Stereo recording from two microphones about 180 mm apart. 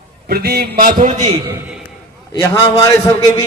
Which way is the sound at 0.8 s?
50° right (ahead or behind).